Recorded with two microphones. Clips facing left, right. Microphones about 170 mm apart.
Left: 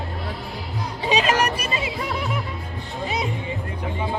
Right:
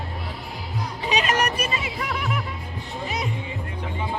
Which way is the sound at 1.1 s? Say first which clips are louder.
Left 3 dB; 30° left (ahead or behind).